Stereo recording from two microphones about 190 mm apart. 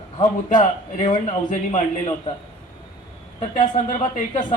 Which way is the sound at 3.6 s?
40° left (ahead or behind).